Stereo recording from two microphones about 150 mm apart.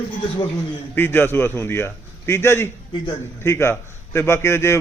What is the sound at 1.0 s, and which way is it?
A man's voice, 15° left (ahead or behind).